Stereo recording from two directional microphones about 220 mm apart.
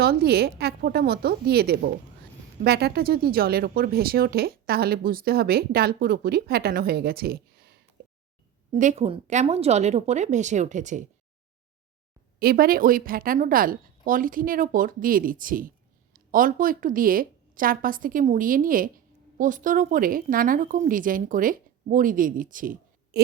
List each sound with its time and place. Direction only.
0.0 s speech: 45° right (ahead or behind)
8.0 s a sound: 45° right (ahead or behind)
8.7 s a woman's voice: 30° right (ahead or behind)
12.4 s a woman's voice: 45° right (ahead or behind)